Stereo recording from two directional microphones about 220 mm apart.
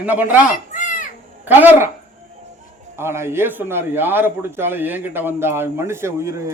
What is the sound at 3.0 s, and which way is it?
A man's voice, 10° right (ahead or behind).